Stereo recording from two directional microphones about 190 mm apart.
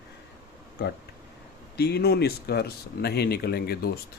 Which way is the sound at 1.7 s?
55° left (ahead or behind).